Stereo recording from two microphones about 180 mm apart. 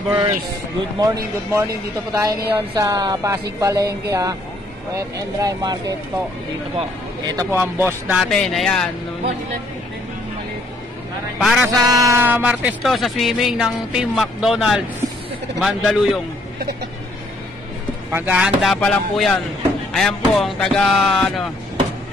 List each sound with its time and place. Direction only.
0.9 s speech: 20° right (ahead or behind)
7.2 s speech: 15° right (ahead or behind); by 8.8 s 5° left (ahead or behind)
11.3 s music: centre (ahead or behind)
11.6 s speech: 20° right (ahead or behind); by 16.2 s centre (ahead or behind)
18.1 s speech: 5° right (ahead or behind)